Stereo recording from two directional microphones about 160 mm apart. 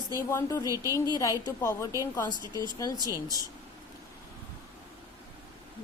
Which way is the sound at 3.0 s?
20° right (ahead or behind).